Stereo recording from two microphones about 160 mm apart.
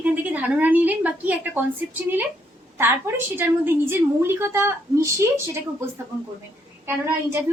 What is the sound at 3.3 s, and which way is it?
A woman's voice, 15° right (ahead or behind).